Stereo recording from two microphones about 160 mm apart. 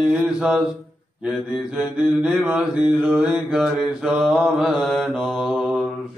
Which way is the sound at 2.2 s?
5° right (ahead or behind).